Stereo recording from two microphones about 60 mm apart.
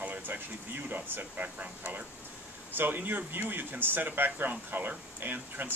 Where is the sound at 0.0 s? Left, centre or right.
Right.